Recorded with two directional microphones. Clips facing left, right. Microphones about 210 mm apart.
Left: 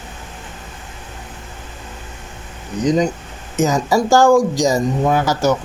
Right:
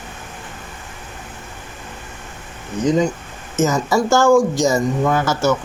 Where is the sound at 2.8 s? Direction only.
15° left (ahead or behind).